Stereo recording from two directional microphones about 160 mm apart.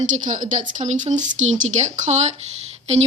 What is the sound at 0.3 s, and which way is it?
A woman's voice, 50° right (ahead or behind).